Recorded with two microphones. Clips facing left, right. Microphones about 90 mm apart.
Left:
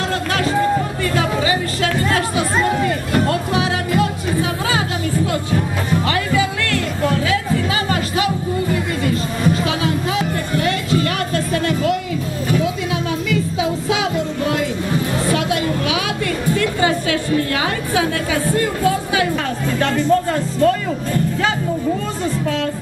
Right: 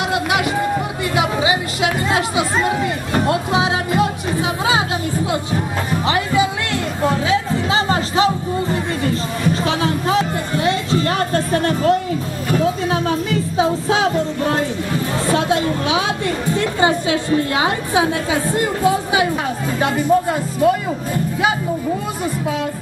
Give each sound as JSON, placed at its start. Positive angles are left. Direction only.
{"t": 0.1, "sound": "music", "side_deg": -15}
{"t": 2.6, "sound": "speech", "side_deg": -15}
{"t": 3.3, "sound": "music", "side_deg": -20}
{"t": 12.4, "sound": "a sound", "side_deg": -40}
{"t": 19.8, "sound": "speech", "side_deg": -15}